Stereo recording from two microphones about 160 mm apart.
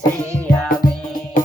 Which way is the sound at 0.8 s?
65° left (ahead or behind).